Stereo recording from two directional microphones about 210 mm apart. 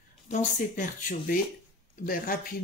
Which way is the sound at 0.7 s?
40° left (ahead or behind).